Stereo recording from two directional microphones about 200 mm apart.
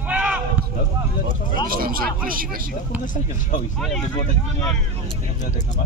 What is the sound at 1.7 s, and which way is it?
Speech, 45° right (ahead or behind).